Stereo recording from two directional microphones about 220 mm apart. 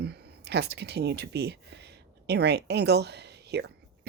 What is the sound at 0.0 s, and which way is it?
Speech, 45° right (ahead or behind).